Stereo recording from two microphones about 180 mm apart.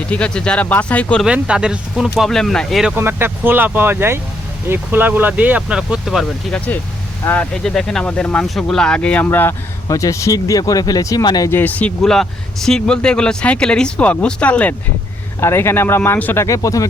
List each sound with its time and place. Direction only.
0.1 s speech: 5° left (ahead or behind)
1.3 s speech: 5° right (ahead or behind)
2.9 s speech: 10° right (ahead or behind); by 16.8 s 20° left (ahead or behind)